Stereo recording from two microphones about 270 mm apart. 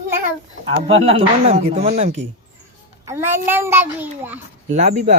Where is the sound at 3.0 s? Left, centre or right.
Centre.